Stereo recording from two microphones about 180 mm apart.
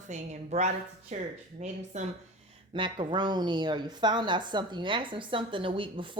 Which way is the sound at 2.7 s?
25° right (ahead or behind).